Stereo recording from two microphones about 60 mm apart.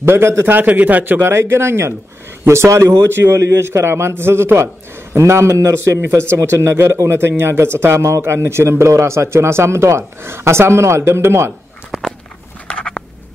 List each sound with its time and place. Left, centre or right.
0.0 s speech: right
0.5 s a man's voice: right
1.2 s speech: right
12.6 s a sound: centre